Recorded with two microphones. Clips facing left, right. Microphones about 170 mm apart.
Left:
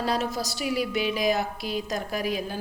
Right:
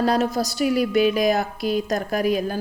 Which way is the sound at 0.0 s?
50° right (ahead or behind).